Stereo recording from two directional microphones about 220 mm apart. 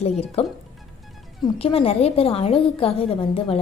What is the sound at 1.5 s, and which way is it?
A woman's voice, 25° left (ahead or behind).